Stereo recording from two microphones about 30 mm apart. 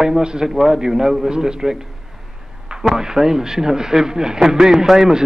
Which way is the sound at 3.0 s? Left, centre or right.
Centre.